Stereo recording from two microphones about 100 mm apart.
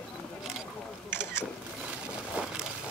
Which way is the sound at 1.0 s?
25° left (ahead or behind).